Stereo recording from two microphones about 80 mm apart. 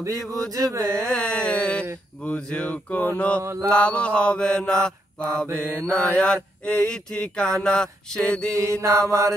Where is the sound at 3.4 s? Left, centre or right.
Right.